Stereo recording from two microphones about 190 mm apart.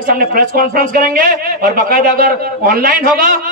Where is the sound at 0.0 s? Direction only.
50° right (ahead or behind).